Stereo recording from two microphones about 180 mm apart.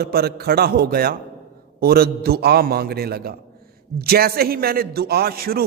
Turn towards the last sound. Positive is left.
turn(degrees=-55)  # may be behind; listen again after turning